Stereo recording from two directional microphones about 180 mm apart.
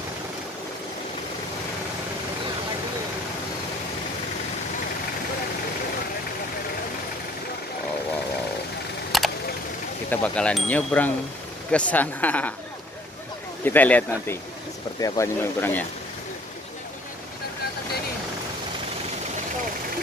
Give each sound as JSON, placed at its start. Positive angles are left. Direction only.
{"t": 9.1, "sound": "vehicle", "side_deg": 0}
{"t": 10.0, "sound": "speech", "side_deg": 10}
{"t": 13.7, "sound": "speech", "side_deg": 10}